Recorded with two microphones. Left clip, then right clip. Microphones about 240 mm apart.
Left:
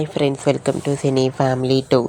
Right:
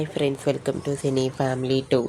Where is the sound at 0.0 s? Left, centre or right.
Centre.